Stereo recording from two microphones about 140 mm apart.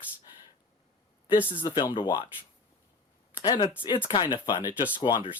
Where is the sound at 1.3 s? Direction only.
35° left (ahead or behind).